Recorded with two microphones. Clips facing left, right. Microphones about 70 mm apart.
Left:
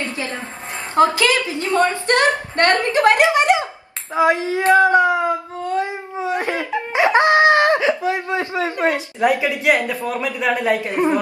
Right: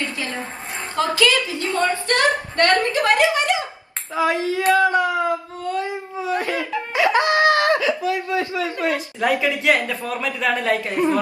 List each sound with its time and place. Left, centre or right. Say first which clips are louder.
0.9 s a woman's voice: left 4 dB; left
4.1 s a sound: left 3 dB; left
9.3 s speech: right 1 dB; left